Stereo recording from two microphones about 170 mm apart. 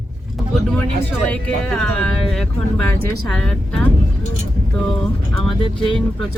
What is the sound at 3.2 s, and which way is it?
Speech, 5° left (ahead or behind).